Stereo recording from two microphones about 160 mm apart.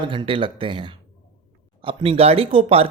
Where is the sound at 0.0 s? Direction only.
30° right (ahead or behind).